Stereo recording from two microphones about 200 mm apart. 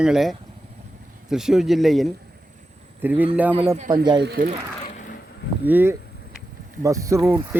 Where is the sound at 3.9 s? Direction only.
20° right (ahead or behind).